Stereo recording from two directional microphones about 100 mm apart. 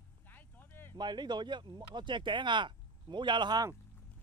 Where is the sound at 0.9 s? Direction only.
45° right (ahead or behind).